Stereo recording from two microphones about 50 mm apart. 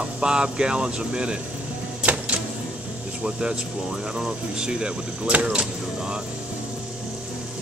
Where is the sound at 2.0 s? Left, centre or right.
Right.